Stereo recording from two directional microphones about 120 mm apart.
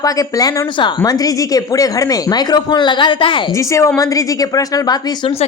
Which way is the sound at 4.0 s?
30° left (ahead or behind).